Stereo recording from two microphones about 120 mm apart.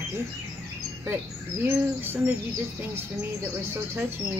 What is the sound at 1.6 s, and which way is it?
Speech, 15° right (ahead or behind).